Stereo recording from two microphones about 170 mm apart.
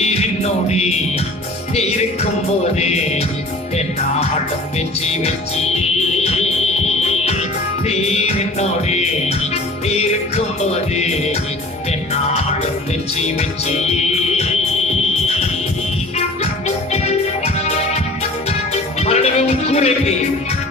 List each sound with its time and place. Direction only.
0.0 s music: 40° left (ahead or behind)
5.0 s music: 40° left (ahead or behind)
6.8 s music: 40° left (ahead or behind)
16.1 s music: 40° left (ahead or behind)